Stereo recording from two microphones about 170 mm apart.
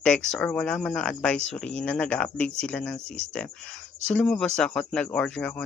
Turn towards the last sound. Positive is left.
turn(degrees=10)  # may be behind; listen again after turning